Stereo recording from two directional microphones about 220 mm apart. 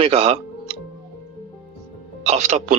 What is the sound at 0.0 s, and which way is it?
Music, 25° right (ahead or behind).